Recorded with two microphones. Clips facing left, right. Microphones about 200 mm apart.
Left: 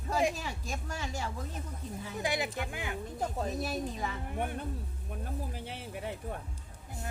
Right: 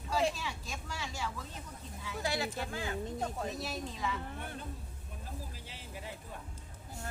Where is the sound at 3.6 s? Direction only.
50° left (ahead or behind).